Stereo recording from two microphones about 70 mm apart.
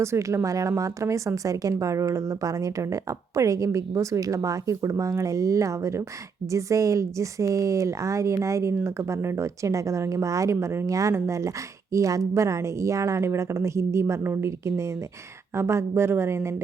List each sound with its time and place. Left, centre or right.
0.0 s a woman's voice: right